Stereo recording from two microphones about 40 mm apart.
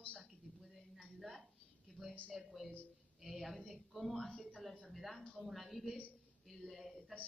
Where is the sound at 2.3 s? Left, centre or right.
Centre.